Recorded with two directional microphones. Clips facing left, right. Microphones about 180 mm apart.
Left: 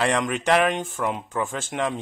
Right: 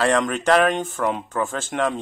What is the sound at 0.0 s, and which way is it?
A man's voice, 15° left (ahead or behind).